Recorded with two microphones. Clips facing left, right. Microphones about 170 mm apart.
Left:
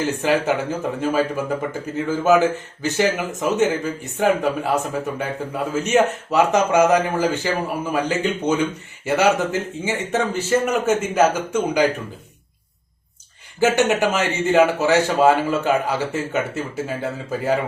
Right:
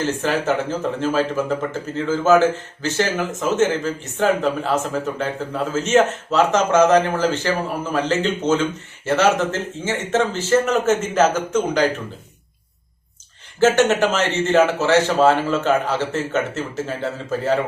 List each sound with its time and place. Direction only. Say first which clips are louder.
0.0 s speech: left 1 dB; 15° left (ahead or behind)
13.6 s speech: right 2 dB; 15° left (ahead or behind)